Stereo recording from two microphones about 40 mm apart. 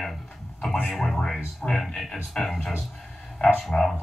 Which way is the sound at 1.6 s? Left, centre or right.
Centre.